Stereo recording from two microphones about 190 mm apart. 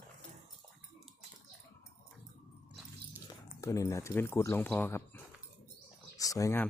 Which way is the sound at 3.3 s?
15° left (ahead or behind).